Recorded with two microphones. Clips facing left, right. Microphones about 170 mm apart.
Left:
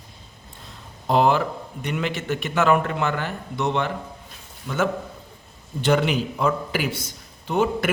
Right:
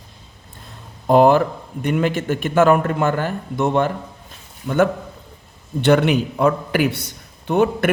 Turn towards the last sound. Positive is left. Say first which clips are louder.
# right 5 dB
turn(degrees=-60)  # may be behind; listen again after turning